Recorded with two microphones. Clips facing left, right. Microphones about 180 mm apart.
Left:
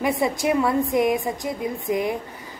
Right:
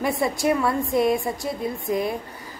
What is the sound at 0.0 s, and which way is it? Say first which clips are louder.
A woman's voice: left 1 dB; 20° left (ahead or behind).